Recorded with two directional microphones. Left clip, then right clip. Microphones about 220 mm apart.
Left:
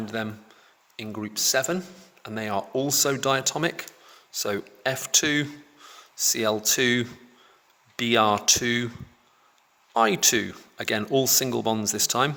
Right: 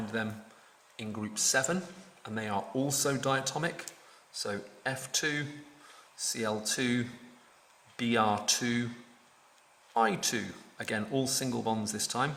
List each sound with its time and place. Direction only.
0.0 s speech: 40° left (ahead or behind)
9.9 s speech: 45° left (ahead or behind)